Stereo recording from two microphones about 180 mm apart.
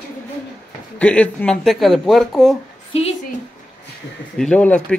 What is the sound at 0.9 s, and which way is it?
A man's voice, 10° left (ahead or behind).